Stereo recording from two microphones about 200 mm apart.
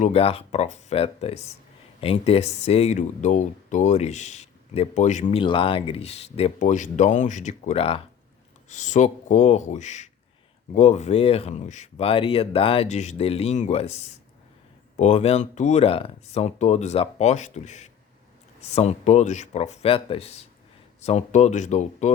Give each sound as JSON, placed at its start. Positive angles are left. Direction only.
{"t": 0.0, "sound": "speech", "side_deg": 30}